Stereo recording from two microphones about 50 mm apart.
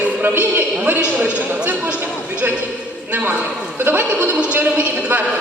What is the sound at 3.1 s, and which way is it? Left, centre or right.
Speech, right.